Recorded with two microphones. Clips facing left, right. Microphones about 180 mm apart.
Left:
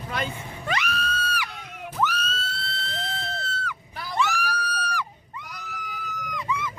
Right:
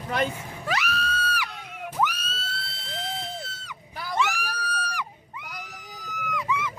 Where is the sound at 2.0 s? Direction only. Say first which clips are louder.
Left 1 dB; 10° right (ahead or behind).